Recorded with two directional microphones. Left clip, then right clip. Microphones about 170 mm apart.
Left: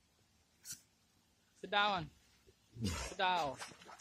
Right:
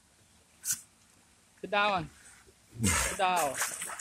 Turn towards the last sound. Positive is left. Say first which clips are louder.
# right 14 dB
turn(degrees=-5)  # may be behind; listen again after turning